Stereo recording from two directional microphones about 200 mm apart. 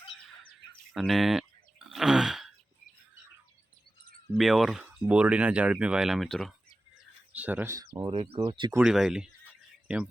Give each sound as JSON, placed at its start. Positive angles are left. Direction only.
{"t": 0.9, "sound": "a sound", "side_deg": 0}
{"t": 4.3, "sound": "speech", "side_deg": 0}
{"t": 8.7, "sound": "speech", "side_deg": -5}